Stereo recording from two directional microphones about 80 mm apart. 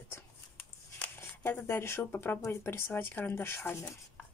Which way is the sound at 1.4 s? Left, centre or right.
Left.